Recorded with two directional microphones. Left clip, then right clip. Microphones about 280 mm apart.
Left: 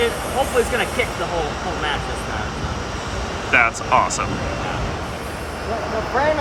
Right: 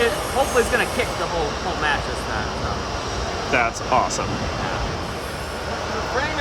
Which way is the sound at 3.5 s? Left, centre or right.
Centre.